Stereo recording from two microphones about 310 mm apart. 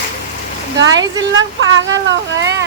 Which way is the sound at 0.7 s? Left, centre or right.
Right.